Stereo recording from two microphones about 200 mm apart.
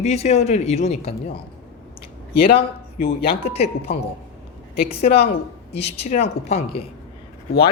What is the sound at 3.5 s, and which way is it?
Speech, 30° left (ahead or behind).